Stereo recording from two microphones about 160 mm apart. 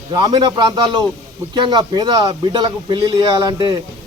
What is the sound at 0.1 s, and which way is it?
A man's voice, 25° right (ahead or behind).